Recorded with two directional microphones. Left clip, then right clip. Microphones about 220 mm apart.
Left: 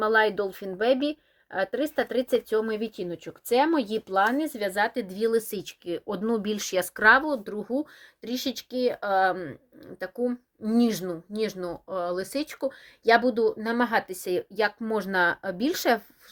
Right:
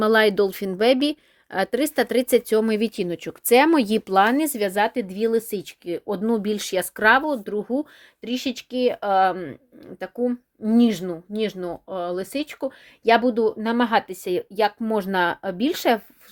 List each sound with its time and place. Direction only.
0.0 s a woman's voice: 55° right (ahead or behind); by 16.0 s 30° right (ahead or behind)